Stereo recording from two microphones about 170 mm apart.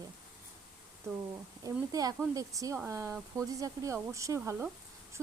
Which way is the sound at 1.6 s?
20° right (ahead or behind).